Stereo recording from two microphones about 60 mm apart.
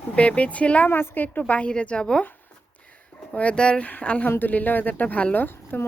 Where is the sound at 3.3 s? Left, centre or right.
Left.